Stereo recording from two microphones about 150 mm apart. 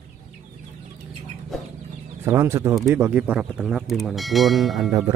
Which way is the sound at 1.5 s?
Centre (ahead or behind).